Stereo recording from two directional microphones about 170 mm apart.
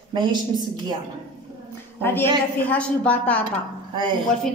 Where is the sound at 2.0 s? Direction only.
10° left (ahead or behind).